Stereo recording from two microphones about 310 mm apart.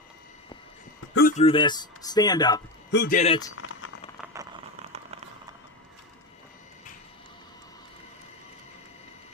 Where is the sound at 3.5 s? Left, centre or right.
Left.